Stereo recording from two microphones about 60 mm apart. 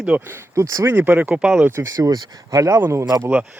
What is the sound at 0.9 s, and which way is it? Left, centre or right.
Speech, right.